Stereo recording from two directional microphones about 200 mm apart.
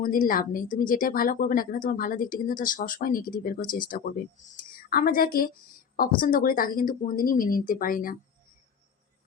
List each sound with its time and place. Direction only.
0.0 s a woman's voice: 45° left (ahead or behind)